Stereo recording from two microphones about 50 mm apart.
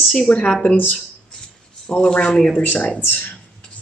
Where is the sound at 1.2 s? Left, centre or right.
Centre.